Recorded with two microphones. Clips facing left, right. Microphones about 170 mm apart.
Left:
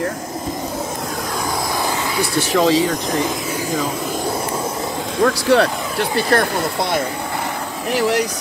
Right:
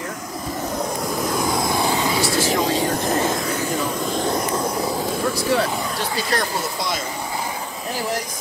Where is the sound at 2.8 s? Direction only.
5° right (ahead or behind).